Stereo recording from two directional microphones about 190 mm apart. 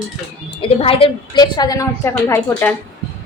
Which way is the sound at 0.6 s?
30° left (ahead or behind).